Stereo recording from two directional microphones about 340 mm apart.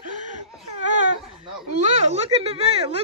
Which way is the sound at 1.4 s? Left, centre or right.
Centre.